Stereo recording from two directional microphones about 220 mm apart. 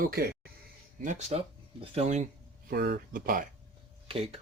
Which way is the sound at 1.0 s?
30° right (ahead or behind).